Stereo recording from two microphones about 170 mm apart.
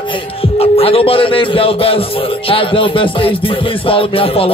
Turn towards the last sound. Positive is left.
turn(degrees=30)  # may be behind; listen again after turning